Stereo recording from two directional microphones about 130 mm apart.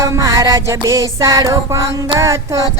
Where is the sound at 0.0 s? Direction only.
25° right (ahead or behind).